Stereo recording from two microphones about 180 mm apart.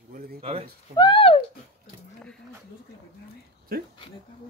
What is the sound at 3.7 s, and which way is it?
Speech, 55° right (ahead or behind).